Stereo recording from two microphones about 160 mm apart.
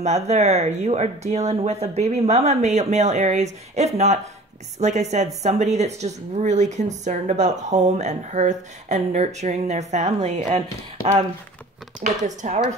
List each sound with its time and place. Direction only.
0.0 s a woman's voice: 45° right (ahead or behind)
12.3 s a woman's voice: 50° right (ahead or behind)